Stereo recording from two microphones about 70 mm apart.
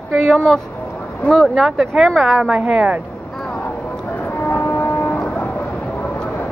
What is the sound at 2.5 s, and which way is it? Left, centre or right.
Speech, centre.